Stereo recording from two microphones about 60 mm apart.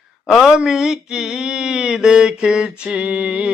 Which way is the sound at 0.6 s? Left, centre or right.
Centre.